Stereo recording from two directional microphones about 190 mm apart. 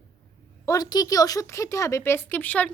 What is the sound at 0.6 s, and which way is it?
A woman's voice, 20° left (ahead or behind).